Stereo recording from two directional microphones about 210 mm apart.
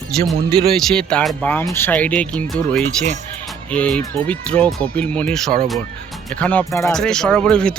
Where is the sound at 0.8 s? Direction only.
5° left (ahead or behind).